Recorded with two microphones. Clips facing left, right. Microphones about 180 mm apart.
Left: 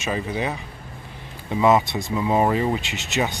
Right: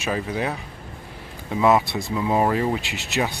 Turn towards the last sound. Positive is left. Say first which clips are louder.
# even
turn(degrees=0)  # may be behind; listen again after turning